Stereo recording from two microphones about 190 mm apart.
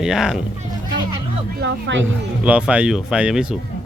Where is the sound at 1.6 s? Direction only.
75° right (ahead or behind).